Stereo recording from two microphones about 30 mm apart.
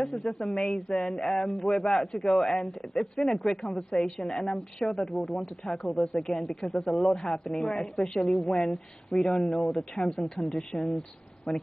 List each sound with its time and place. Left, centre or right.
0.1 s speech: left
2.1 s speech: centre